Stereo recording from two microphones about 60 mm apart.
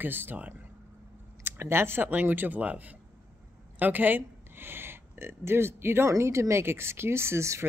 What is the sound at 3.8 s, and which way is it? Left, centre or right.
Speech, right.